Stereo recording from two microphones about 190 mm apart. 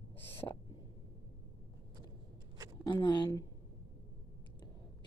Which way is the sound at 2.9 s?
25° left (ahead or behind).